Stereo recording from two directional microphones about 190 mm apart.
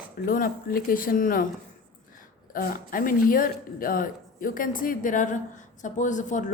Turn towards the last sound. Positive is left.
turn(degrees=40)  # may be behind; listen again after turning